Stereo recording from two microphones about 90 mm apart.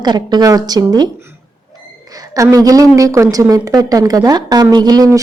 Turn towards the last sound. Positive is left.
turn(degrees=-40)  # may be behind; listen again after turning